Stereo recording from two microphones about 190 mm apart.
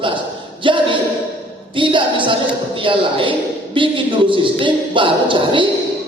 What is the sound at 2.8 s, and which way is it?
A woman's voice, 25° right (ahead or behind).